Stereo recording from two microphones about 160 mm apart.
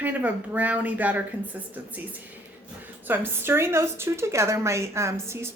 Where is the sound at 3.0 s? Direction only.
15° right (ahead or behind).